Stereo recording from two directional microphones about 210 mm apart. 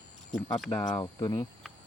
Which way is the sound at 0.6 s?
20° left (ahead or behind).